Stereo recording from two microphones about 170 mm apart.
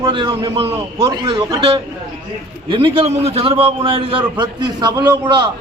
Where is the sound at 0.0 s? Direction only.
30° right (ahead or behind).